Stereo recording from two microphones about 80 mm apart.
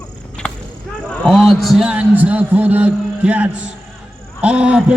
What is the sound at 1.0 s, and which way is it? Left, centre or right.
Speech, centre.